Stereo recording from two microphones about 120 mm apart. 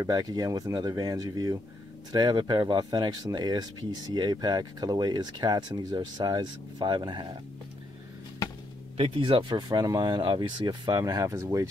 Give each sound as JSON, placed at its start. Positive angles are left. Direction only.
{"t": 0.0, "sound": "speech", "side_deg": -30}
{"t": 8.9, "sound": "speech", "side_deg": -45}